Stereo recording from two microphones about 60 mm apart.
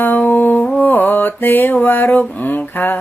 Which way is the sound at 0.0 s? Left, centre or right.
Left.